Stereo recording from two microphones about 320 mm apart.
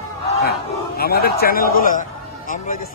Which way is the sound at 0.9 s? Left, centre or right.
Left.